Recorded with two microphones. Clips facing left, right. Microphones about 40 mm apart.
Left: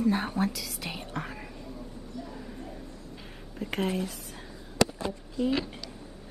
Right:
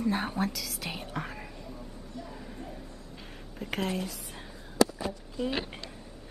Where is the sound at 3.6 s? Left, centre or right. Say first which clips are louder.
Left 2 dB; centre.